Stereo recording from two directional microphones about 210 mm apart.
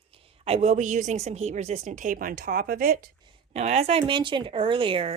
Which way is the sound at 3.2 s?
30° right (ahead or behind).